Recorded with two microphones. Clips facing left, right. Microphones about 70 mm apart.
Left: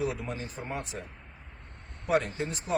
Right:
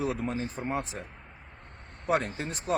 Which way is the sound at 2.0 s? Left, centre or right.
Right.